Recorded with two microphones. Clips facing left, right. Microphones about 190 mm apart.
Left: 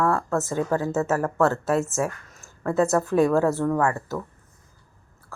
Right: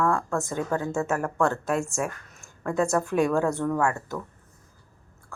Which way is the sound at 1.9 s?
15° right (ahead or behind).